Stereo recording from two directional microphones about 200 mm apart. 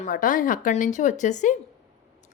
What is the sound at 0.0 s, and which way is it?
A woman's voice, 40° left (ahead or behind).